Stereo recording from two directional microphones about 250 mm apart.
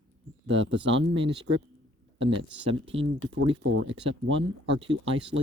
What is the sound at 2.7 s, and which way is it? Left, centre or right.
Speech, right.